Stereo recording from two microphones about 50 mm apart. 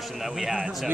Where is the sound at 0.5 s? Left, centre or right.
Right.